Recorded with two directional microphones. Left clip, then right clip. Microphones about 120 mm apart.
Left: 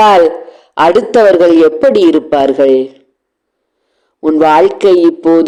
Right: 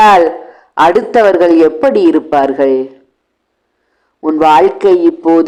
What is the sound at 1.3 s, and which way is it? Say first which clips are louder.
A man's voice: left 1 dB; 15° left (ahead or behind).